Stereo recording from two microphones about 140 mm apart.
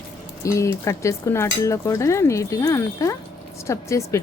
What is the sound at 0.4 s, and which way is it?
Speech, 20° left (ahead or behind).